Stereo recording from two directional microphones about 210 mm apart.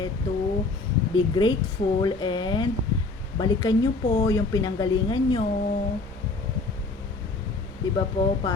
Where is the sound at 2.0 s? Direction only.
20° left (ahead or behind).